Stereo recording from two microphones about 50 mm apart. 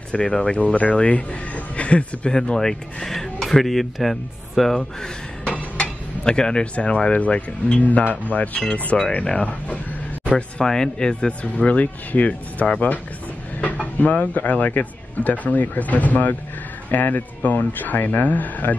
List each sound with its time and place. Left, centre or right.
0.1 s speech: left
2.3 s speech: centre
5.5 s cutlery: centre
7.1 s speech: left
8.9 s speech: centre
9.3 s speech: left
10.6 s speech: centre; by 18.8 s left